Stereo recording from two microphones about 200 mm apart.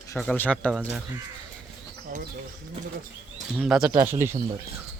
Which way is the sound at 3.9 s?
15° right (ahead or behind).